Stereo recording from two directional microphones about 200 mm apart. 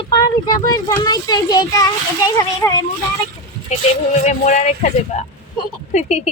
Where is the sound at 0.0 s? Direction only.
20° left (ahead or behind).